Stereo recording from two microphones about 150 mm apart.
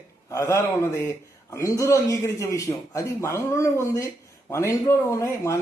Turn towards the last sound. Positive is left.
turn(degrees=20)  # may be behind; listen again after turning